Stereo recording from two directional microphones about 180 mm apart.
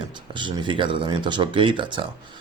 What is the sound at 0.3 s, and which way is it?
A man's voice, 25° right (ahead or behind).